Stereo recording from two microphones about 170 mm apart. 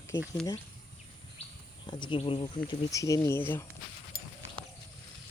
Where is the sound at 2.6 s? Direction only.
20° left (ahead or behind).